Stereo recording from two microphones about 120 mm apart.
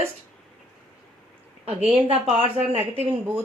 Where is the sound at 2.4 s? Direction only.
60° right (ahead or behind).